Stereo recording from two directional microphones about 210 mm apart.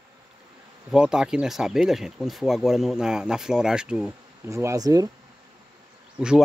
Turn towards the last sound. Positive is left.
turn(degrees=-5)  # may be behind; listen again after turning